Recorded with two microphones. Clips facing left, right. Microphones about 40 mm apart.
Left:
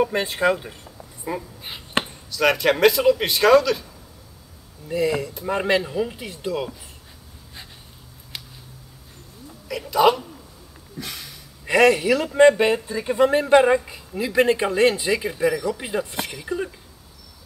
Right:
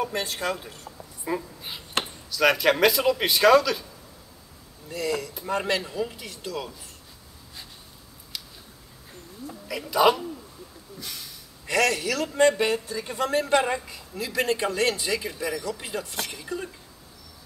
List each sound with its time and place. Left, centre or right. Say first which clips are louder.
0.0 s speech: left 8 dB; left
1.3 s speech: even; centre
4.8 s speech: left 6 dB; left
9.7 s speech: left 3 dB; centre
11.6 s speech: left 7 dB; left